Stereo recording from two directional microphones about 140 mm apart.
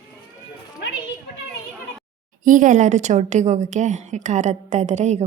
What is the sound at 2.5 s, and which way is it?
A woman's voice, 70° right (ahead or behind).